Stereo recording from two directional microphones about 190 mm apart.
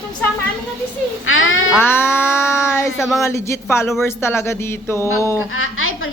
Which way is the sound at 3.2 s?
15° left (ahead or behind).